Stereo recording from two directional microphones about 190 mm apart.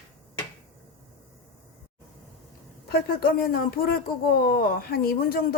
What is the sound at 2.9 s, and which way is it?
Speech, 50° left (ahead or behind).